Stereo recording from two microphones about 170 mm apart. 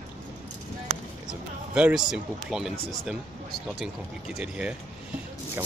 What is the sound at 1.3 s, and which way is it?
Speech, 5° right (ahead or behind).